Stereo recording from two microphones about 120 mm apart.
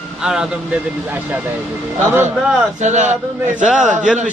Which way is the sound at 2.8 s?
80° right.